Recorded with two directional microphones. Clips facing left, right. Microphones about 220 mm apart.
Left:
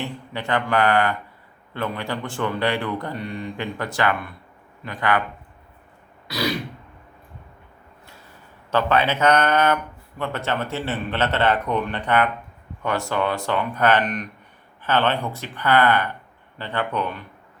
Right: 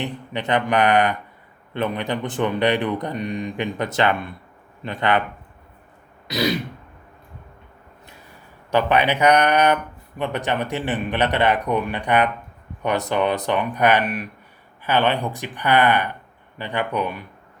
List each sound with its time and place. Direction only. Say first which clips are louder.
0.0 s speech: right 3 dB; 20° right (ahead or behind)
6.2 s throat clearing: right 3 dB; 20° right (ahead or behind)
8.7 s a man's voice: right 2 dB; 15° right (ahead or behind)